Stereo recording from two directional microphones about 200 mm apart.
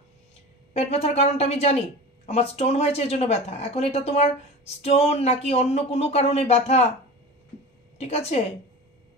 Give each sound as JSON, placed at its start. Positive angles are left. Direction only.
{"t": 0.7, "sound": "speech", "side_deg": 30}
{"t": 8.0, "sound": "speech", "side_deg": 30}